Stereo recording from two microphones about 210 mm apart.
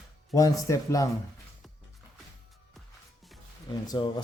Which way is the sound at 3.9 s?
20° left (ahead or behind).